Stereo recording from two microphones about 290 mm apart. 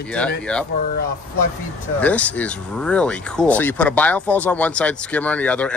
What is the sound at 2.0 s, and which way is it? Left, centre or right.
Speech, centre.